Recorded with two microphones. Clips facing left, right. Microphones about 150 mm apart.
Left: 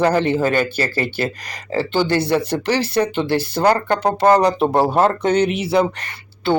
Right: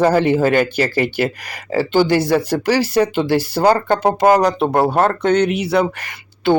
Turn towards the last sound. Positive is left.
turn(degrees=-10)  # may be behind; listen again after turning